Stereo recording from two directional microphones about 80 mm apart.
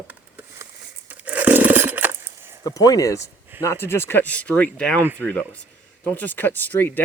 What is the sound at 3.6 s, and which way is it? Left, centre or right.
Speech, left.